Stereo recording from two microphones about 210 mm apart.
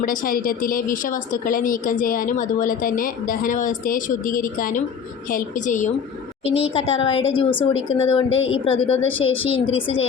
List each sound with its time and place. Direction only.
0.0 s a woman's voice: 40° left (ahead or behind); by 10.1 s 25° left (ahead or behind)